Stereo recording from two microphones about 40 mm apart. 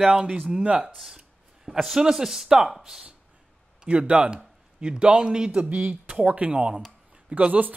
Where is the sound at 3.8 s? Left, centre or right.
Right.